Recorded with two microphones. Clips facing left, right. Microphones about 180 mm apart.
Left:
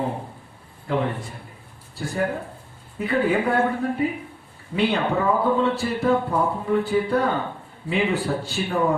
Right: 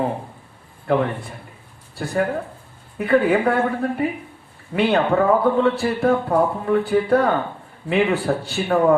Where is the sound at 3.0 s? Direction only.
60° right (ahead or behind).